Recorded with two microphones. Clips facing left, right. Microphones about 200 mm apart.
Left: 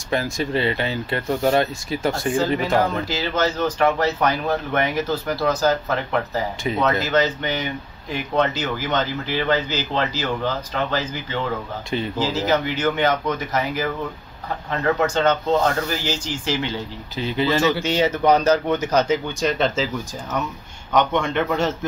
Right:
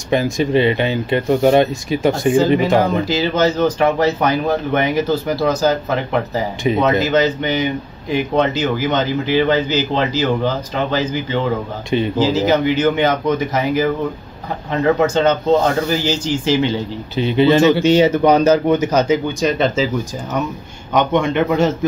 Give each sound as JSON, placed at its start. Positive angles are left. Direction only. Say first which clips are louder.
{"t": 0.1, "sound": "speech", "louder": "right 7 dB", "side_deg": -20}
{"t": 20.9, "sound": "speech", "louder": "right 4 dB", "side_deg": -15}